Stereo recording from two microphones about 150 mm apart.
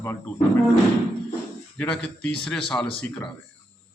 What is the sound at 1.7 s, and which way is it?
A man's voice, 10° left (ahead or behind).